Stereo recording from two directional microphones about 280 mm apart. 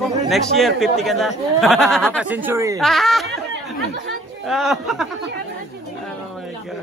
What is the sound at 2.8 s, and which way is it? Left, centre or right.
Speech, centre.